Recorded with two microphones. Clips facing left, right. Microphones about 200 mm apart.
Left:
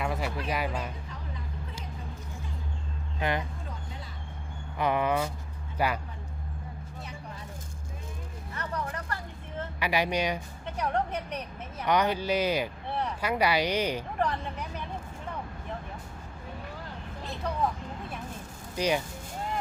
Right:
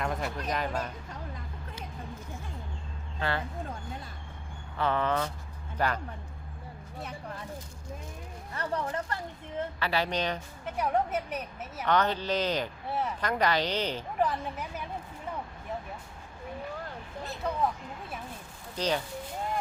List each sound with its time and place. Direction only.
0.0 s a sound: 5° left (ahead or behind)
0.5 s speech: 10° left (ahead or behind)
3.2 s speech: 15° left (ahead or behind)
4.8 s speech: 15° left (ahead or behind)
8.5 s speech: 30° right (ahead or behind)
9.8 s speech: 15° left (ahead or behind)
10.8 s a woman's voice: 5° right (ahead or behind)
11.9 s speech: 10° left (ahead or behind)
12.9 s a sound: 5° right (ahead or behind)
13.2 s speech: 10° left (ahead or behind)
14.2 s a woman's voice: 5° right (ahead or behind)
18.8 s speech: 10° left (ahead or behind)